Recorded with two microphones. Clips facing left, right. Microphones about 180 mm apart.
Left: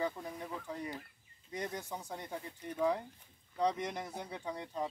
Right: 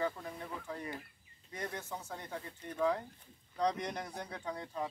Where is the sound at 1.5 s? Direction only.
15° left (ahead or behind).